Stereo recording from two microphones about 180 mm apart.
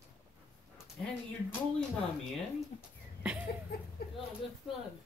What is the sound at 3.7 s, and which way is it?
Speech, 60° left (ahead or behind).